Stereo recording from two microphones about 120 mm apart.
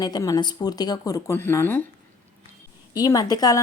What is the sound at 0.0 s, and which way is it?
Speech, 30° left (ahead or behind).